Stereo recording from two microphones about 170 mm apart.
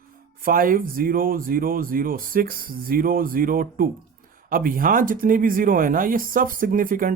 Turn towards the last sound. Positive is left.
turn(degrees=-55)  # may be behind; listen again after turning